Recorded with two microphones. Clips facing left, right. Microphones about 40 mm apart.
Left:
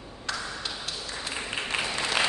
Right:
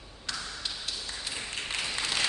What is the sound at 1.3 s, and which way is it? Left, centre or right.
Applause, left.